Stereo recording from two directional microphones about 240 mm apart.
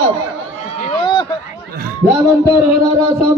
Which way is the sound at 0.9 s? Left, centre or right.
Left.